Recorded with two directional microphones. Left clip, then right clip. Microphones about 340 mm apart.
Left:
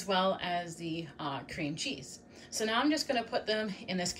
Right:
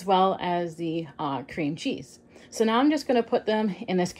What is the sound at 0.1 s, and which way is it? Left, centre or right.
A woman's voice, centre.